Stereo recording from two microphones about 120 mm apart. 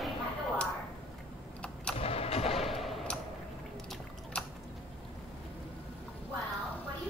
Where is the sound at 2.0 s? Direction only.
55° left (ahead or behind).